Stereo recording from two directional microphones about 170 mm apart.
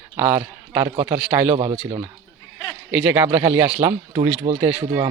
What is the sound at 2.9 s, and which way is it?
Speech, 5° right (ahead or behind).